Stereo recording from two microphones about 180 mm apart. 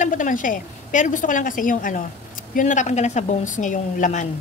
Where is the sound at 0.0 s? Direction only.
45° left (ahead or behind).